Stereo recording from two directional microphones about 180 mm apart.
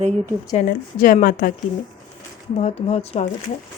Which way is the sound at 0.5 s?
50° left (ahead or behind).